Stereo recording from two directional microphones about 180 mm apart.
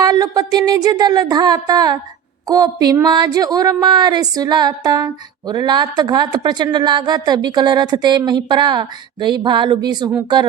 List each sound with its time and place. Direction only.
0.0 s a woman's voice: 20° right (ahead or behind)